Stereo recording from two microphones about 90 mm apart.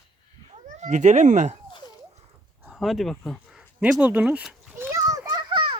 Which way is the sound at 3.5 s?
5° right (ahead or behind).